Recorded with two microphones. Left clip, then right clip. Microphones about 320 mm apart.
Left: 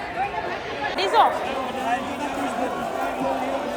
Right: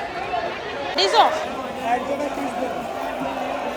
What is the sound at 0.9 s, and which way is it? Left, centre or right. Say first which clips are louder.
Speech: right 2 dB; centre.